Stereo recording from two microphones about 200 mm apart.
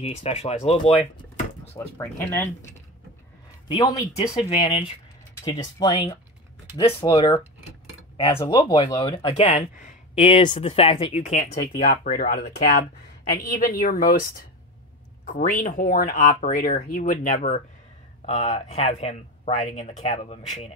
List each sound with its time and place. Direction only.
0.0 s speech: 30° left (ahead or behind)
2.0 s speech: 10° left (ahead or behind)
3.6 s speech: 20° left (ahead or behind)
4.5 s speech: 30° left (ahead or behind)
5.4 s speech: 20° left (ahead or behind)
11.6 s speech: 50° left (ahead or behind)
15.2 s speech: 40° left (ahead or behind)